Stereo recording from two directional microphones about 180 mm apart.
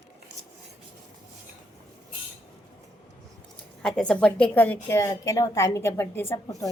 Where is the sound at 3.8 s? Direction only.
5° left (ahead or behind).